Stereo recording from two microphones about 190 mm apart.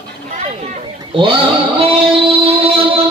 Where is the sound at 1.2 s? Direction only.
25° right (ahead or behind).